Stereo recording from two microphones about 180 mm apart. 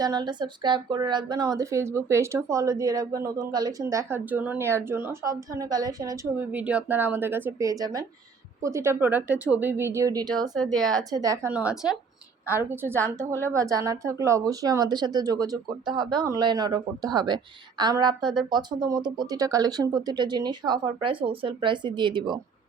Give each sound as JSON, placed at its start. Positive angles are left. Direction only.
{"t": 0.0, "sound": "speech", "side_deg": -25}
{"t": 6.5, "sound": "a woman's voice", "side_deg": -10}
{"t": 10.8, "sound": "speech", "side_deg": 0}
{"t": 11.1, "sound": "speech", "side_deg": -20}
{"t": 11.5, "sound": "a woman's voice", "side_deg": -5}